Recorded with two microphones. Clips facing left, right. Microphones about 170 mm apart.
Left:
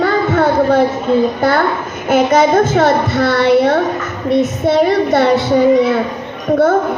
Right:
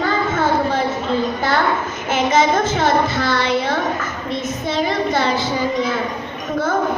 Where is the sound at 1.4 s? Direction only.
55° left (ahead or behind).